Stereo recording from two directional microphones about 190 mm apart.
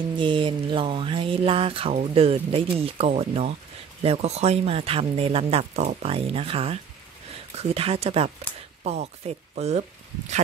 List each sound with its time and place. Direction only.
0.2 s speech: 25° right (ahead or behind)